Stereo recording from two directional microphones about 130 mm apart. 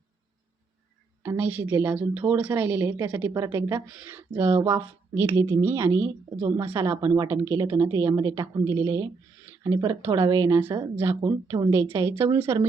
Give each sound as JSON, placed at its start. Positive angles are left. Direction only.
{"t": 1.2, "sound": "speech", "side_deg": -15}